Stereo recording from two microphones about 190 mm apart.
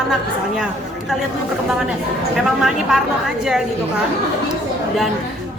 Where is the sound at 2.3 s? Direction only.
Centre (ahead or behind).